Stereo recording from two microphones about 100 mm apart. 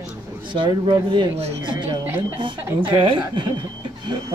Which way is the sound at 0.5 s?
55° right (ahead or behind).